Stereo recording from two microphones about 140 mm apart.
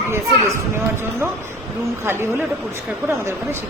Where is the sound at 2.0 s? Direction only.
15° right (ahead or behind).